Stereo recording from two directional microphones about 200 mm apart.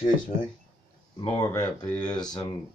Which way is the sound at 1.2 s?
15° left (ahead or behind).